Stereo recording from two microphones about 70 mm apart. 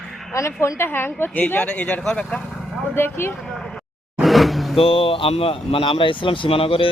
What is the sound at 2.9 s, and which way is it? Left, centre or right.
Speech, left.